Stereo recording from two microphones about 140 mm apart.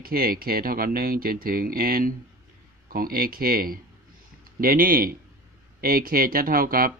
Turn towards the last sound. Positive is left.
turn(degrees=-90)